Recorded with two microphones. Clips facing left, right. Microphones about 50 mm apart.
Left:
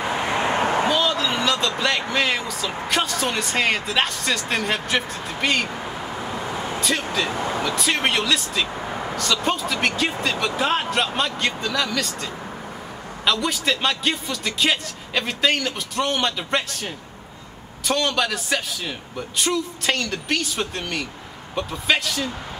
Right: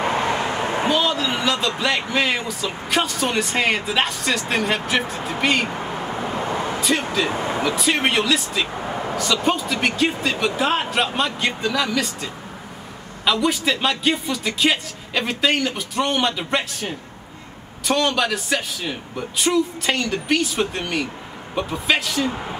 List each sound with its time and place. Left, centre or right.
0.3 s a sound: left
0.6 s a sound: left
0.8 s a sound: centre
1.8 s a man's voice: centre
5.8 s vehicle: centre
6.3 s vehicle: right
6.9 s a man's voice: centre
7.2 s speech: right
7.6 s a man's voice: centre